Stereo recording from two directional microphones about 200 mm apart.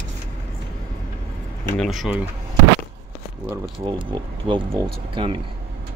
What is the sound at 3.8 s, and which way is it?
Speech, 25° right (ahead or behind).